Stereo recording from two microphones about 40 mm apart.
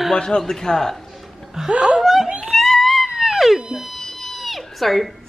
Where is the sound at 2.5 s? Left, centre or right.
Centre.